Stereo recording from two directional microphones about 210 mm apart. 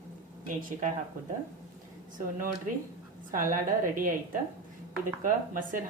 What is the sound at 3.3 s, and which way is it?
Speech, 40° right (ahead or behind).